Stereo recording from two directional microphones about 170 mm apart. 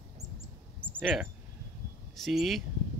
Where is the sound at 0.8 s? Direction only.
10° right (ahead or behind).